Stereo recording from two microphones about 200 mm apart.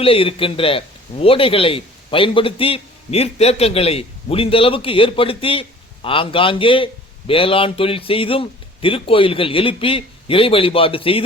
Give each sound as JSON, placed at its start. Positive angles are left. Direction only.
{"t": 0.0, "sound": "speech", "side_deg": 30}